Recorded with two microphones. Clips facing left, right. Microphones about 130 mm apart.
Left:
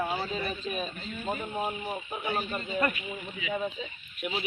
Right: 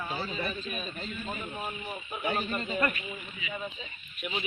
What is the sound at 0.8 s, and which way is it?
Speech, 35° left (ahead or behind).